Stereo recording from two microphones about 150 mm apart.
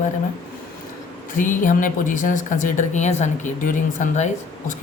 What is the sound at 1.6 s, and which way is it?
Speech, 60° left (ahead or behind).